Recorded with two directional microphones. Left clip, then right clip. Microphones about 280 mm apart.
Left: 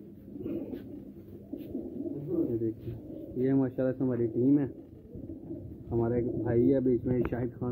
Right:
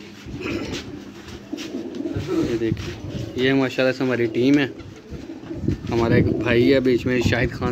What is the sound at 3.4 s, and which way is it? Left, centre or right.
Speech, centre.